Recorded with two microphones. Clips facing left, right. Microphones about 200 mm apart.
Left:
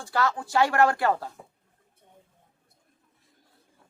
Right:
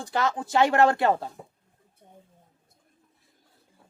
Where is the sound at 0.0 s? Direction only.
20° right (ahead or behind).